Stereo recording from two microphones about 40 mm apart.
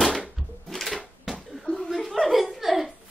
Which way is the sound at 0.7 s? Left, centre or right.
Centre.